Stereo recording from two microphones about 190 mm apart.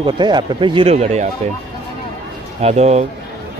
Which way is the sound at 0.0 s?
25° right (ahead or behind).